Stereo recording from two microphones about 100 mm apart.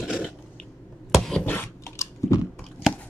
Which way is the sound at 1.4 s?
20° left (ahead or behind).